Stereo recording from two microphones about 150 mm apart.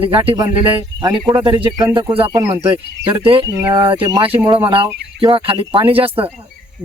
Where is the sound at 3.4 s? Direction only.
25° right (ahead or behind).